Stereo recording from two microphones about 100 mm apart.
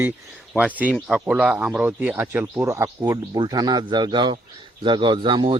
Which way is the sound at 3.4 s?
40° right (ahead or behind).